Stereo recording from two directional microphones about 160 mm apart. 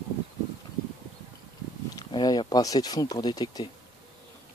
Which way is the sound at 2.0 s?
25° left (ahead or behind).